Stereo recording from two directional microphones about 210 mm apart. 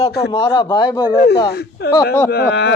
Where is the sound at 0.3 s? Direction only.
20° left (ahead or behind).